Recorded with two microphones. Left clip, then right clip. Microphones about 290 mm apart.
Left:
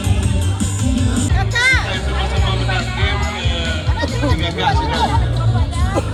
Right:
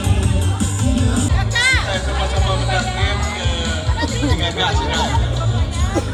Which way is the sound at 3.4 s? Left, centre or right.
Right.